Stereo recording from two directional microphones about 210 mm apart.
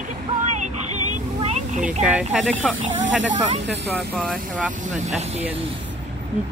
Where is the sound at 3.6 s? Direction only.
5° right (ahead or behind).